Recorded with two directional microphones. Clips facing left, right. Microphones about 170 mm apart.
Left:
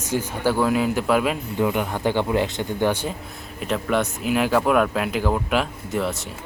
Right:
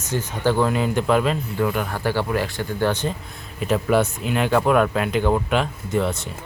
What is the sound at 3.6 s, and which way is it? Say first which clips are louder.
Speech: right 3 dB; 5° right (ahead or behind).